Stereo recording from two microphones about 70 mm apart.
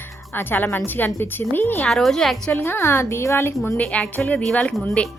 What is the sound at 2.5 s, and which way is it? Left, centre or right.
Music, left.